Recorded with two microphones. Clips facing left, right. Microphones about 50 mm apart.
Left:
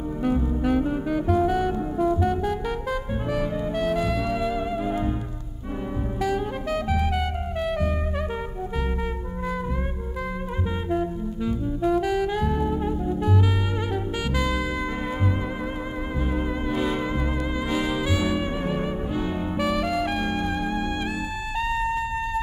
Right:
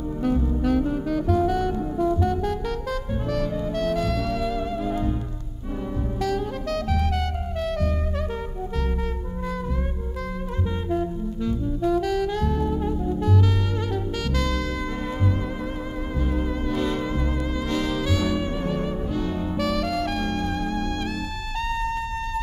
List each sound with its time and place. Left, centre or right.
0.2 s music: centre
6.2 s music: centre
10.9 s saxophone: left
14.3 s music: centre
16.7 s music: centre